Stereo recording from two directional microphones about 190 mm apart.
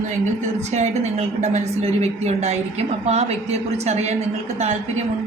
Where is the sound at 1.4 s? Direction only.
35° right (ahead or behind).